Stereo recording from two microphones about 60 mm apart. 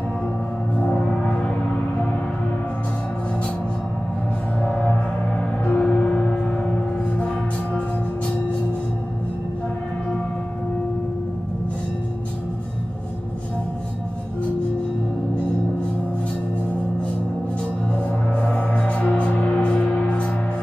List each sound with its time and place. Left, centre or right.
0.7 s gong: centre
4.6 s gong: centre
5.7 s music: centre
18.3 s music: centre